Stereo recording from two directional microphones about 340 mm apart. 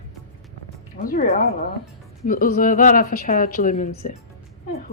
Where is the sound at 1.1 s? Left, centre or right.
Left.